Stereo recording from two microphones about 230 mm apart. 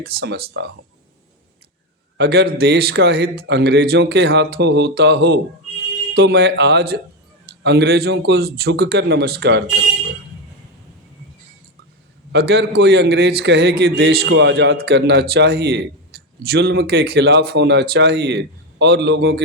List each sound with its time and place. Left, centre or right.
0.0 s a man's voice: right
2.1 s a man's voice: right
12.3 s a man's voice: right